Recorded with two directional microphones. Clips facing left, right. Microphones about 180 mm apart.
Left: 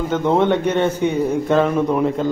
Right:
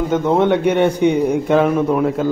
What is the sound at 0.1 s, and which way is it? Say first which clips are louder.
A man's voice: right 1 dB; 5° right (ahead or behind).